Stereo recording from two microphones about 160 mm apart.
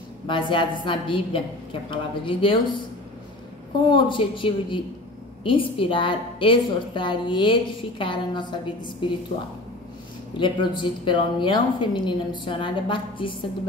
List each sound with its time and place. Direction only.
0.3 s a woman's voice: 30° left (ahead or behind)
3.9 s a woman's voice: 30° left (ahead or behind)
10.4 s a woman's voice: 30° left (ahead or behind)